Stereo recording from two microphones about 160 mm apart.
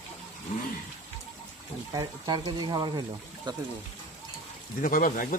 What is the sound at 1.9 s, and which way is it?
Speech, 25° right (ahead or behind).